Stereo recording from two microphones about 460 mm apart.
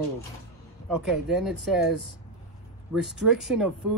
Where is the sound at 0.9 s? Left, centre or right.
Centre.